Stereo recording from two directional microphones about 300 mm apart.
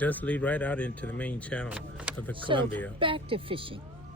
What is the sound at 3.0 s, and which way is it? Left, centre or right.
Speech, centre.